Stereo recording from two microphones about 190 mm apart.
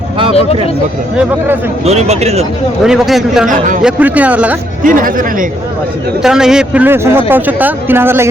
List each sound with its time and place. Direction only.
1.8 s speech: 35° right (ahead or behind)
2.8 s a man's voice: centre (ahead or behind)
4.8 s speech: 45° right (ahead or behind)
6.2 s a man's voice: 5° right (ahead or behind)